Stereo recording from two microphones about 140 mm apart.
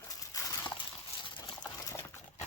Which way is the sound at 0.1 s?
25° left (ahead or behind).